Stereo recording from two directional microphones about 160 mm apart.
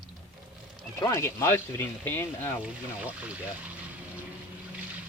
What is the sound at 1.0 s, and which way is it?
Speech, 15° left (ahead or behind).